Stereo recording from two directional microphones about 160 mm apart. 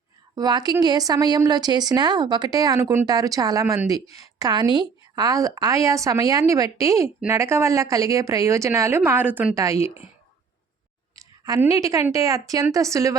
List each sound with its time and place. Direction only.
0.3 s a woman's voice: 25° right (ahead or behind)
11.1 s a sound: 20° right (ahead or behind)
11.6 s speech: 20° right (ahead or behind)